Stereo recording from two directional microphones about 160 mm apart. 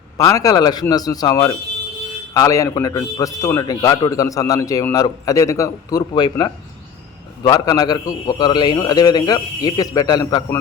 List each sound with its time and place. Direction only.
0.3 s a man's voice: 20° left (ahead or behind)